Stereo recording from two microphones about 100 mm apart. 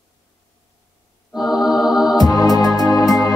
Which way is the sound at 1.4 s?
5° right (ahead or behind).